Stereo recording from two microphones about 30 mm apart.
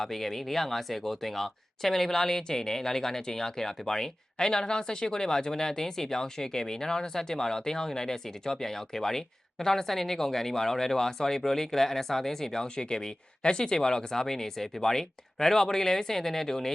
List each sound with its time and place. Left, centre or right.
0.0 s speech: centre
12.6 s speech: left; by 16.7 s centre